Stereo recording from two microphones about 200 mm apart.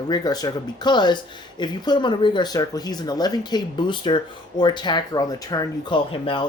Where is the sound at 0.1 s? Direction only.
20° left (ahead or behind).